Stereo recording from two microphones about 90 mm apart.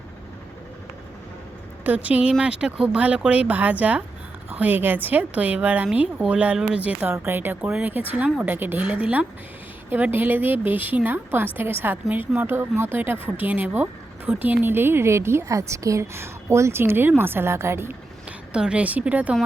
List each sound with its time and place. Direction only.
1.8 s a woman's voice: 15° right (ahead or behind)
18.3 s a woman's voice: 10° right (ahead or behind)